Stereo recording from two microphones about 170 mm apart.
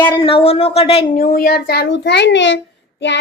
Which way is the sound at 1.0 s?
55° left (ahead or behind).